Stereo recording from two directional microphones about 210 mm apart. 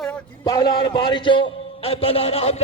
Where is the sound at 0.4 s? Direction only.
15° left (ahead or behind).